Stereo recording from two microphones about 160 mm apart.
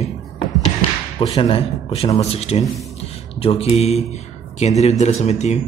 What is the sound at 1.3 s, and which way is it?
Speech, 35° left (ahead or behind).